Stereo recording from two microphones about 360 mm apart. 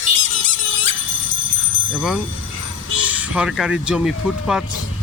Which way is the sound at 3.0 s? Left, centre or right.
Centre.